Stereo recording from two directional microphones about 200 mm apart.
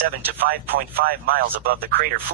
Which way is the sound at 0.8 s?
50° right (ahead or behind).